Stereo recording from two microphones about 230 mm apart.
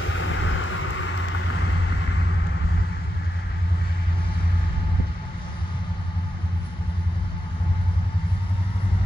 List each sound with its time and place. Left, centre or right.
0.0 s vehicle: left